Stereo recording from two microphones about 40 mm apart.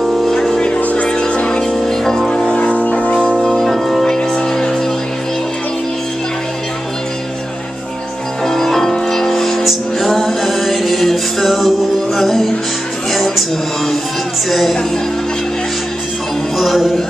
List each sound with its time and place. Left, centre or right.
0.3 s music: centre
0.7 s music: left
1.0 s music: left
2.7 s music: left
3.3 s music: centre
8.5 s music: centre
13.1 s a sound: centre
14.5 s music: centre
16.5 s music: centre